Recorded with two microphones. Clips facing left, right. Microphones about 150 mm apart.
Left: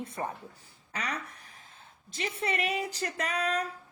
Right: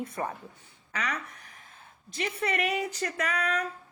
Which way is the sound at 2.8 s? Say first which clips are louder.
Right 2 dB; 30° left (ahead or behind).